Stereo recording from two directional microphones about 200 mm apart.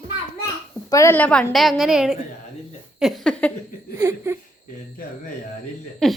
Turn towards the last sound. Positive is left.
turn(degrees=0)  # may be behind; listen again after turning